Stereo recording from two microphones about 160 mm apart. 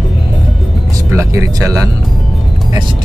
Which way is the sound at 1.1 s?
20° right (ahead or behind).